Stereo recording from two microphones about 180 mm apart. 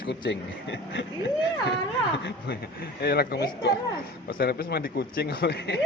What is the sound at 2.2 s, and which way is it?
Speech, 70° left (ahead or behind).